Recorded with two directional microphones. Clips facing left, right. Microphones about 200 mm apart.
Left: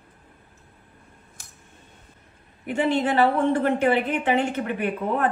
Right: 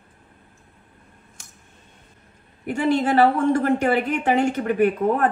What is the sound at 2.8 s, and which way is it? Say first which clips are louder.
A woman's voice: right 3 dB; 45° right (ahead or behind).